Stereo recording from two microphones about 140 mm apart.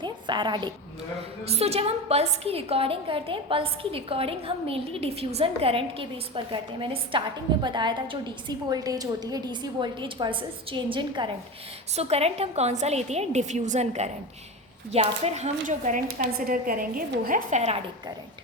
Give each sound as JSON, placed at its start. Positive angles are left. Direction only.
{"t": 0.0, "sound": "a woman's voice", "side_deg": -35}
{"t": 1.5, "sound": "a woman's voice", "side_deg": -50}
{"t": 11.9, "sound": "a woman's voice", "side_deg": -50}